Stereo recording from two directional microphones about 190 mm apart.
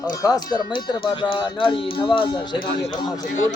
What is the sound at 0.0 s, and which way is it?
Speech, 20° left (ahead or behind).